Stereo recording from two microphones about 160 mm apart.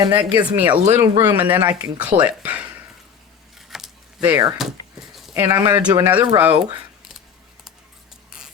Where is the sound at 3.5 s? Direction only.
Centre (ahead or behind).